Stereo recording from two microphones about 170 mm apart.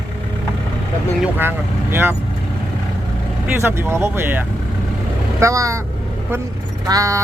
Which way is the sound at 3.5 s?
15° right (ahead or behind).